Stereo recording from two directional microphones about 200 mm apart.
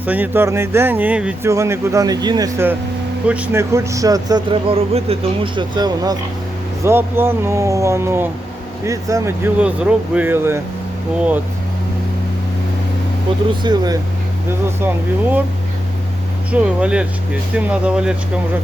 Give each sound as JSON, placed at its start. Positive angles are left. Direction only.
{"t": 0.0, "sound": "speech", "side_deg": -10}
{"t": 13.6, "sound": "speech", "side_deg": -20}
{"t": 14.8, "sound": "speech", "side_deg": -10}
{"t": 16.5, "sound": "speech", "side_deg": -5}